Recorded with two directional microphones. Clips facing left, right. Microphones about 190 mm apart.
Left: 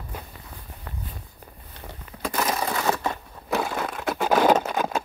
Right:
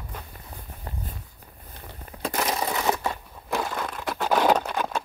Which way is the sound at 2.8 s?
15° right (ahead or behind).